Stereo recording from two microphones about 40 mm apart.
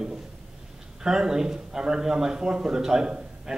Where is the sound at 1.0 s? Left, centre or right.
Centre.